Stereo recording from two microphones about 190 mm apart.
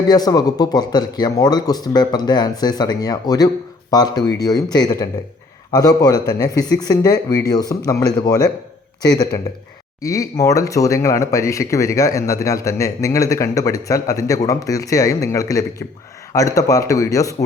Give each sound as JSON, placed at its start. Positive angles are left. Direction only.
{"t": 0.1, "sound": "a man's voice", "side_deg": 20}